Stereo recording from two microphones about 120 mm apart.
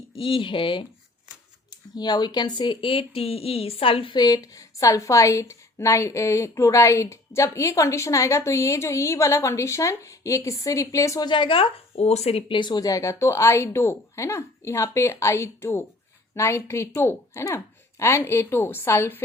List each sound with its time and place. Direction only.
0.2 s speech: 45° left (ahead or behind); by 11.3 s 25° left (ahead or behind)
11.3 s speech: 45° left (ahead or behind); by 19.2 s 20° left (ahead or behind)